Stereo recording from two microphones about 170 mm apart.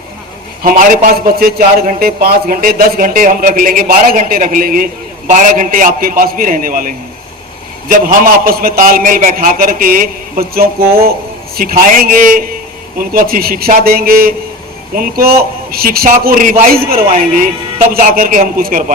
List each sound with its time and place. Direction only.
0.6 s a man's voice: 60° right (ahead or behind)